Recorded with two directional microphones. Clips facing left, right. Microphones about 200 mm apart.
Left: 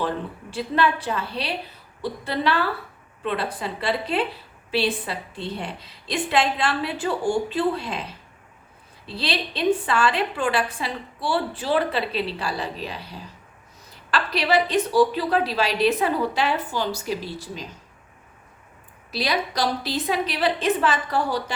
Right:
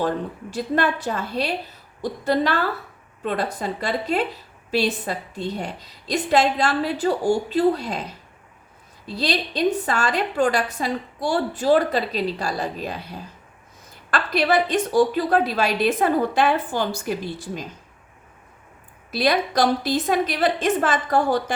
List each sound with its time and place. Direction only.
0.5 s a woman's voice: 45° right (ahead or behind)
9.0 s a woman's voice: 45° right (ahead or behind)
19.1 s a woman's voice: 50° right (ahead or behind)